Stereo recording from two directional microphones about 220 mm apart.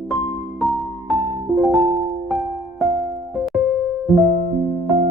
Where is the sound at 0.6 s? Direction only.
Centre (ahead or behind).